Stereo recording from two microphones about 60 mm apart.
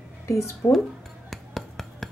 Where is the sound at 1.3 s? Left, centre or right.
Centre.